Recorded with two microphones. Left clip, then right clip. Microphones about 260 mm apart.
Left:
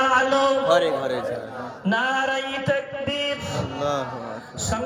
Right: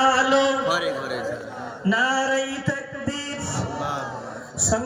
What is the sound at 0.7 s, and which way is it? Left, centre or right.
Speech, centre.